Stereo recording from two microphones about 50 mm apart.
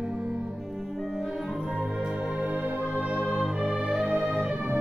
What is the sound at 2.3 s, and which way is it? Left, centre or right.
Music, right.